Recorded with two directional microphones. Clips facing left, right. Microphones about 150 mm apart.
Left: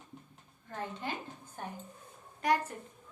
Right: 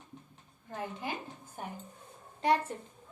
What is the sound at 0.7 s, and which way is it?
A woman's voice, 15° right (ahead or behind).